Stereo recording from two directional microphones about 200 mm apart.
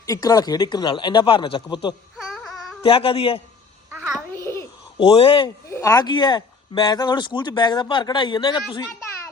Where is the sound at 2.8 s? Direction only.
25° left (ahead or behind).